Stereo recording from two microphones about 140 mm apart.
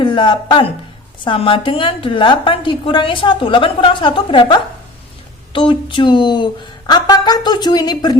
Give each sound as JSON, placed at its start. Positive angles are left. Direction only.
{"t": 0.0, "sound": "a woman's voice", "side_deg": 35}